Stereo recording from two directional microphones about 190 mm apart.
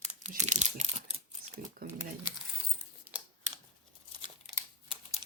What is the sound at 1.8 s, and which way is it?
Speech, 50° right (ahead or behind).